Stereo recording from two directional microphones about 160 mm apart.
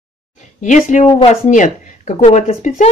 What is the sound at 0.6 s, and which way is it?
Speech, 50° left (ahead or behind).